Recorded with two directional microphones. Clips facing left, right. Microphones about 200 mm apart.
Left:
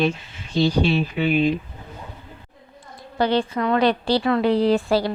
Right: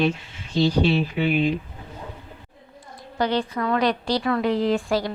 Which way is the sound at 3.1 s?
30° left (ahead or behind).